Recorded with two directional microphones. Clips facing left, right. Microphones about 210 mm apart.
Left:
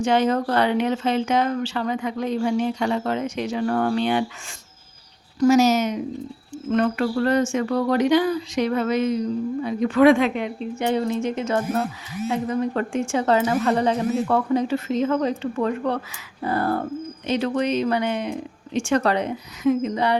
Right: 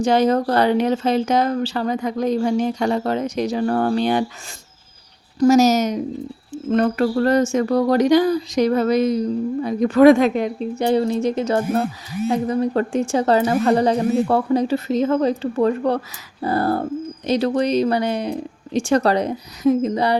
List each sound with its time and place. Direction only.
0.0 s speech: 40° right (ahead or behind)
5.4 s speech: 40° right (ahead or behind)